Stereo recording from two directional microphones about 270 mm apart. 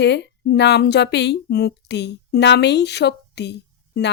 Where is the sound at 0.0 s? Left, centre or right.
Left.